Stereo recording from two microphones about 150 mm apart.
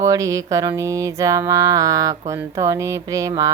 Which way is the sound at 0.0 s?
20° right (ahead or behind).